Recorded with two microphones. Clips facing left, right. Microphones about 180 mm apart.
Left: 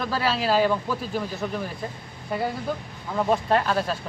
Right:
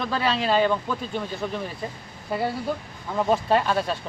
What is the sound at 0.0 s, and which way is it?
Speech, 5° left (ahead or behind).